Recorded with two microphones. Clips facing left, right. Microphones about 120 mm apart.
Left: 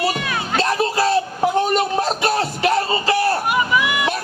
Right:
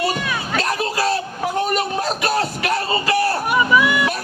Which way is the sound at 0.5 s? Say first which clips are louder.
Left 4 dB; 30° left (ahead or behind).